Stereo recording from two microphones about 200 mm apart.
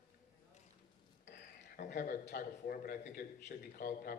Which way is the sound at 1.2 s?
60° left (ahead or behind).